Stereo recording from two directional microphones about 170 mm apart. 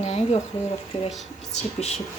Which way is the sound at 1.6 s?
40° left (ahead or behind).